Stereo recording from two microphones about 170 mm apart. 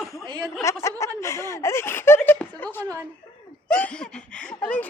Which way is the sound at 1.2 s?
15° left (ahead or behind).